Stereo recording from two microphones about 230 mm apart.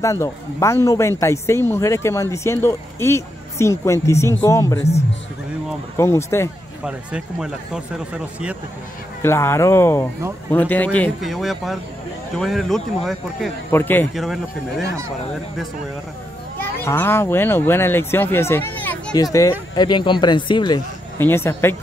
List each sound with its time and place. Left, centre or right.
0.0 s speech: centre
5.9 s speech: centre
6.8 s a man's voice: centre
9.2 s a man's voice: centre
16.5 s speech: centre